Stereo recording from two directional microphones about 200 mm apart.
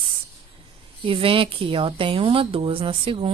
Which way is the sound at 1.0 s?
25° right (ahead or behind).